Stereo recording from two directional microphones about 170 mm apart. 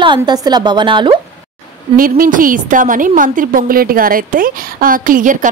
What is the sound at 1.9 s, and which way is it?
A woman's voice, 55° right (ahead or behind).